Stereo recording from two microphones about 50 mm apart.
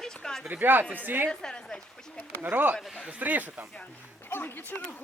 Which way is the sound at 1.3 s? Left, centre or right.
Centre.